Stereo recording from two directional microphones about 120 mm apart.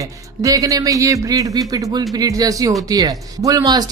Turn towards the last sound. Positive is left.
turn(degrees=-30)  # may be behind; listen again after turning